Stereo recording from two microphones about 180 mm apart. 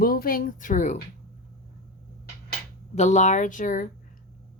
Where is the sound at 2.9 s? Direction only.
40° left (ahead or behind).